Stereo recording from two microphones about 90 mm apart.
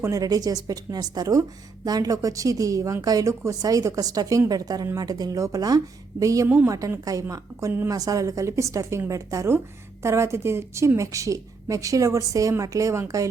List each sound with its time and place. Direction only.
0.0 s a woman's voice: 40° right (ahead or behind)